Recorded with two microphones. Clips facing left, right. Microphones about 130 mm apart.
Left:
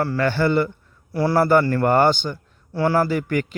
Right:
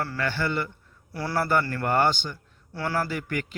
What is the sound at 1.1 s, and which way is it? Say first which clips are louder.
Speech: left 9 dB; 25° left (ahead or behind).